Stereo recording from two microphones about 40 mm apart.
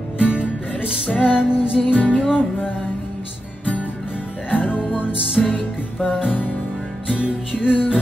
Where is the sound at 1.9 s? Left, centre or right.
Left.